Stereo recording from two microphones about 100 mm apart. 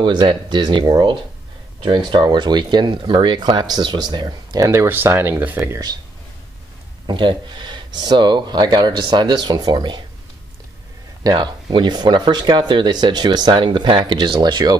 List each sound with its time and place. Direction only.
0.0 s speech: 50° right (ahead or behind); by 5.6 s 15° right (ahead or behind)
5.6 s speech: 30° right (ahead or behind)
7.1 s speech: 50° right (ahead or behind)
11.2 s speech: 50° right (ahead or behind)